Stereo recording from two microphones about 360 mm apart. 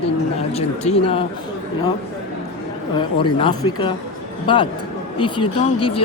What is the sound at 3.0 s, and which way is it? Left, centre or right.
Speech, centre.